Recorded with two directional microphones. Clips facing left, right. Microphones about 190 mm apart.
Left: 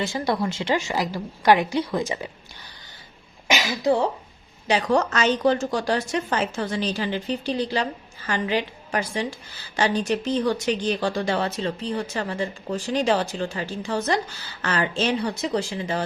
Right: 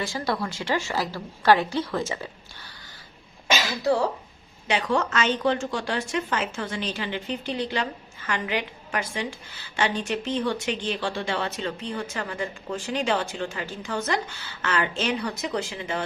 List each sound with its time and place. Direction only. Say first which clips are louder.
0.0 s a woman's voice: left 3 dB; 20° left (ahead or behind)
3.4 s speech: left 2 dB; 15° left (ahead or behind)
4.7 s speech: left 3 dB; 40° left (ahead or behind)